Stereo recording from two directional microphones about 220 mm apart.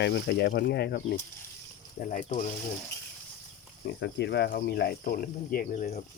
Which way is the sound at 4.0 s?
50° left (ahead or behind).